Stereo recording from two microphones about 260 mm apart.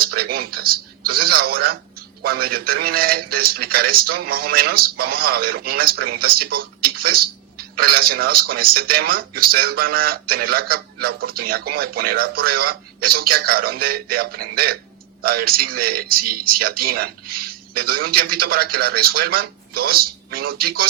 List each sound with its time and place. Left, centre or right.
0.0 s speech: right